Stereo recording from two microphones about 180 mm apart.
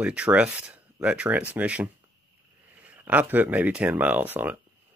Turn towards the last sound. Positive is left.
turn(degrees=-10)  # may be behind; listen again after turning